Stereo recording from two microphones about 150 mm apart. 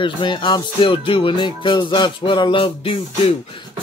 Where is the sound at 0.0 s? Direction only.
35° left (ahead or behind).